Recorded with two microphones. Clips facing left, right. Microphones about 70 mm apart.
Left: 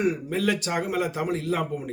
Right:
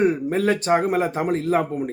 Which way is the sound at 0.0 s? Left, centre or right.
Right.